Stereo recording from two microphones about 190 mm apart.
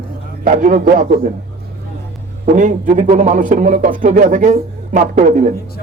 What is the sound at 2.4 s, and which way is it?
A man's voice, 40° right (ahead or behind).